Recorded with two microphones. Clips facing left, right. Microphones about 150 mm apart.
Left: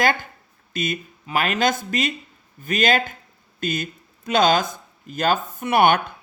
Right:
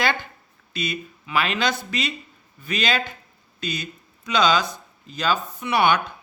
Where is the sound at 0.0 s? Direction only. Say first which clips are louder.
Left 3 dB; 45° left (ahead or behind).